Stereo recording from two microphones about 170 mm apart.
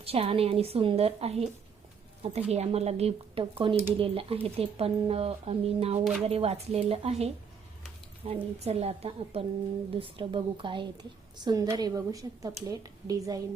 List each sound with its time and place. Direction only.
0.0 s a woman's voice: 35° right (ahead or behind)